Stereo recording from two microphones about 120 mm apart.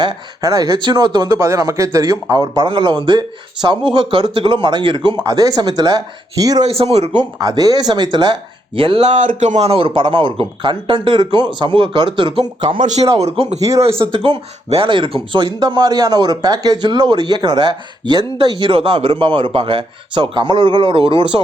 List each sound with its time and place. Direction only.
0.0 s speech: 30° right (ahead or behind)
5.2 s speech: 30° right (ahead or behind)
6.7 s speech: 60° right (ahead or behind)
7.1 s speech: 35° right (ahead or behind)
9.0 s speech: 90° right
9.6 s speech: 50° right (ahead or behind)
12.8 s a man's voice: 75° right (ahead or behind)
13.1 s speech: 60° right (ahead or behind)
13.6 s speech: 25° right (ahead or behind)
13.8 s speech: 50° right (ahead or behind)